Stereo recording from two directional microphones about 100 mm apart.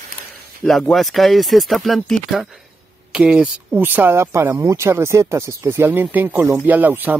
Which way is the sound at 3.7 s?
20° right (ahead or behind).